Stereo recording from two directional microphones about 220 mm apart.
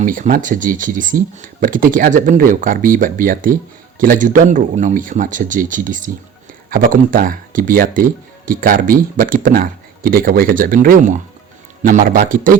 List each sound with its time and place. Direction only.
0.0 s speech: 40° right (ahead or behind)